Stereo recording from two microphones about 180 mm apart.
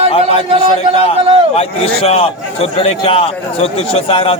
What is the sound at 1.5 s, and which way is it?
A man's voice, 35° left (ahead or behind).